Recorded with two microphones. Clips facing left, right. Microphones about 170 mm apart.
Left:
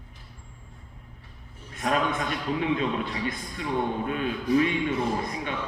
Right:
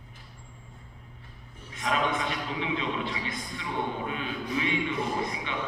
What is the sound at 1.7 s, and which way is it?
A man's voice, 45° left (ahead or behind).